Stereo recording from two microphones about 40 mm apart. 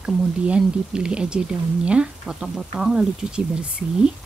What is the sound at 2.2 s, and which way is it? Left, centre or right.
Speech, centre.